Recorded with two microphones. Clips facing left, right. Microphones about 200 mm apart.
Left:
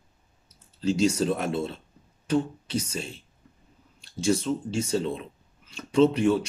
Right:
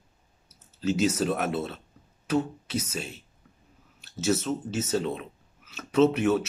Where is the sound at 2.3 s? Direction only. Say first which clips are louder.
Left 1 dB; 5° right (ahead or behind).